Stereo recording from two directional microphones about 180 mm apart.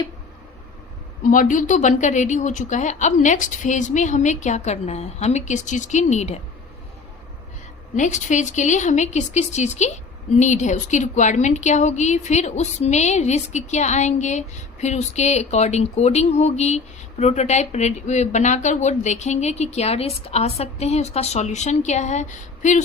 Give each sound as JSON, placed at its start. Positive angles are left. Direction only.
{"t": 1.2, "sound": "a woman's voice", "side_deg": 45}
{"t": 7.9, "sound": "a woman's voice", "side_deg": 45}